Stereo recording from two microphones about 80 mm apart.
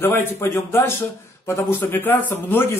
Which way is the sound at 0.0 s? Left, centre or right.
Left.